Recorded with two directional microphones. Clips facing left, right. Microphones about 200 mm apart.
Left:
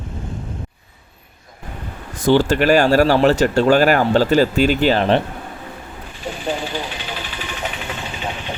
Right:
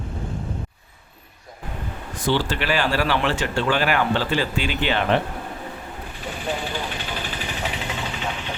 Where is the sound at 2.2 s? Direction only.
45° left (ahead or behind).